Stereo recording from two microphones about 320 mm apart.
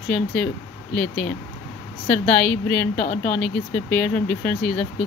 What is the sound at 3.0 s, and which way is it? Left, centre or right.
Speech, left.